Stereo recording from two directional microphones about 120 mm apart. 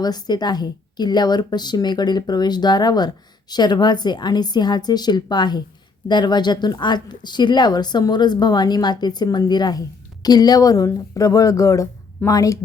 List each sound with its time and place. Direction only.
0.0 s speech: 35° left (ahead or behind)